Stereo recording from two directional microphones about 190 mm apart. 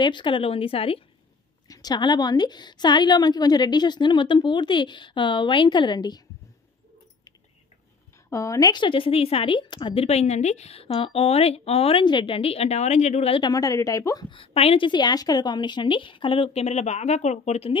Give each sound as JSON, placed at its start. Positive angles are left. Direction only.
{"t": 0.0, "sound": "speech", "side_deg": 25}
{"t": 8.3, "sound": "speech", "side_deg": 15}